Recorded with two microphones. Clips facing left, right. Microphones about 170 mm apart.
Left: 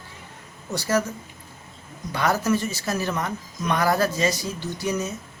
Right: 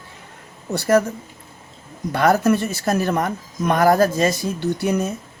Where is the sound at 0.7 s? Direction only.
55° right (ahead or behind).